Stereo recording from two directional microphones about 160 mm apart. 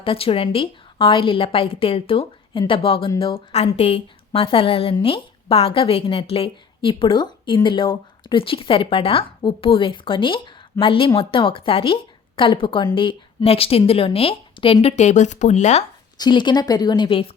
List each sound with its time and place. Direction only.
0.0 s a woman's voice: 35° left (ahead or behind)
16.1 s a woman's voice: 25° left (ahead or behind)